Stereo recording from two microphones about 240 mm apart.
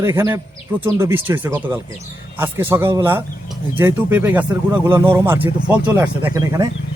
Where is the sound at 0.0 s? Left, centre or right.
Centre.